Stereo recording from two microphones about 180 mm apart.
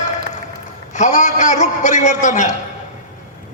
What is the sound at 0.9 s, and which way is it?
A man's voice, 40° left (ahead or behind).